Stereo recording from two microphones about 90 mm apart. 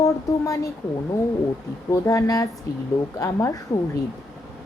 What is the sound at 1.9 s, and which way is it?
Speech, 35° left (ahead or behind).